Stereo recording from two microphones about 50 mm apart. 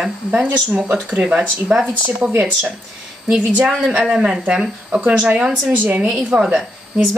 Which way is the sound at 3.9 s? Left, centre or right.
Right.